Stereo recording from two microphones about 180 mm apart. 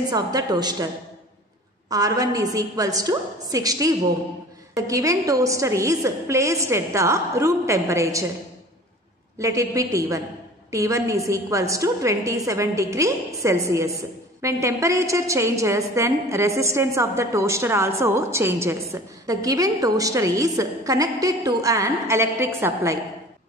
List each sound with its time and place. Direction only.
0.1 s a woman's voice: 20° right (ahead or behind)
1.9 s a woman's voice: 20° right (ahead or behind)
9.4 s a woman's voice: 15° right (ahead or behind)